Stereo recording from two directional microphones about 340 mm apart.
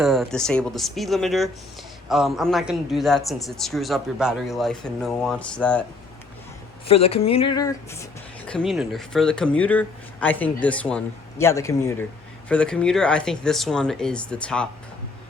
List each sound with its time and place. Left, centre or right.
0.0 s a man's voice: centre
6.8 s a man's voice: centre